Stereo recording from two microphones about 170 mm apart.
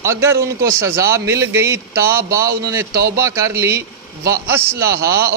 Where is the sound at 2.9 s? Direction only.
65° right (ahead or behind).